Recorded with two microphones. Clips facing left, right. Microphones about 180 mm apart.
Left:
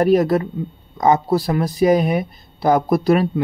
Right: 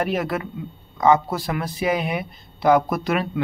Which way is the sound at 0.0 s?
40° left (ahead or behind).